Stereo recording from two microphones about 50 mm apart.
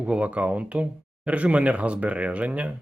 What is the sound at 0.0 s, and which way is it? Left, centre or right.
Speech, right.